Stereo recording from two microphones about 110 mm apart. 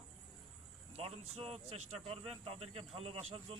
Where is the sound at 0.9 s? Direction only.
65° right (ahead or behind).